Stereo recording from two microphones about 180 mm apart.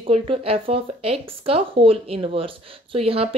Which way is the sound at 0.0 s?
30° right (ahead or behind).